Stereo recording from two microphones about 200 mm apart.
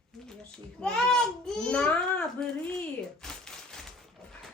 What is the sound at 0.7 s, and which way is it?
A child's voice, 5° left (ahead or behind).